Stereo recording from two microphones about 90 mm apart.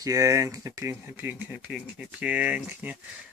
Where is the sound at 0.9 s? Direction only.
25° right (ahead or behind).